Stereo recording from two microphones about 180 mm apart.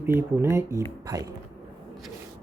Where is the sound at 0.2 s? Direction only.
15° right (ahead or behind).